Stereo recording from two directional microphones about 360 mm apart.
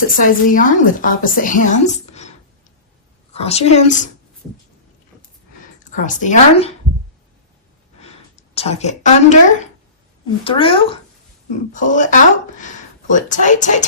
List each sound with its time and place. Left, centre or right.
0.2 s a woman's voice: left
3.3 s a woman's voice: centre
5.9 s a woman's voice: left
8.0 s a woman's voice: centre